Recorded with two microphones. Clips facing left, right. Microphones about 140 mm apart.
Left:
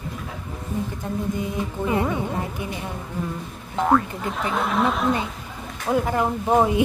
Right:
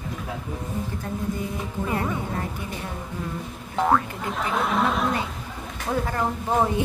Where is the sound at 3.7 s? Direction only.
Centre (ahead or behind).